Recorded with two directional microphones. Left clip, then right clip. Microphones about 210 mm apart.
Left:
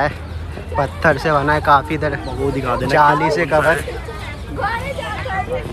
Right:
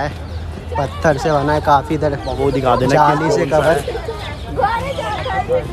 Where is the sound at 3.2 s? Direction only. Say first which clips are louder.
Right 1 dB; 20° right (ahead or behind).